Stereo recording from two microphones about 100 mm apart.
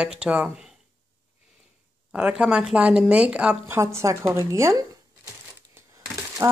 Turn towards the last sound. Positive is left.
turn(degrees=-35)  # may be behind; listen again after turning